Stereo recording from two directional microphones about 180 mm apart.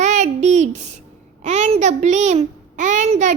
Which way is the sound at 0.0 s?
40° right (ahead or behind).